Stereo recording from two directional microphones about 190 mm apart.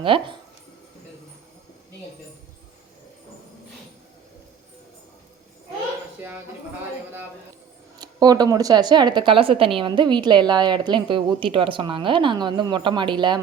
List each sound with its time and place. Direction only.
0.0 s speech: 25° right (ahead or behind)
7.9 s speech: 20° right (ahead or behind)